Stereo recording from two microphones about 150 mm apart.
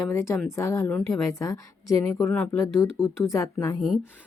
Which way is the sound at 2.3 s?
10° left (ahead or behind).